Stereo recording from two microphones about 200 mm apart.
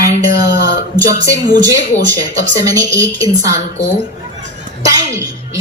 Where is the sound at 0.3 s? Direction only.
50° left (ahead or behind).